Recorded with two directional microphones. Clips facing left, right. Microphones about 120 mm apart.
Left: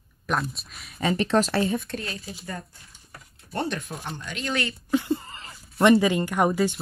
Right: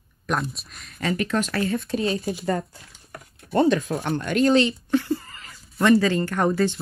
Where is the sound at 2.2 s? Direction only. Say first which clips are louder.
Right 12 dB; 60° right (ahead or behind).